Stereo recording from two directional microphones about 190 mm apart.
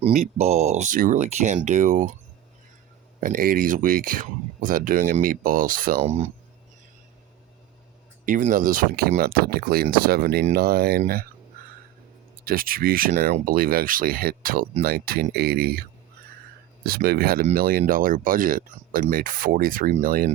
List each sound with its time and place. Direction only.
0.0 s speech: 35° right (ahead or behind)
3.2 s speech: 45° right (ahead or behind)
6.0 s speech: 35° right (ahead or behind)
8.2 s speech: 45° right (ahead or behind)
12.5 s speech: 50° right (ahead or behind)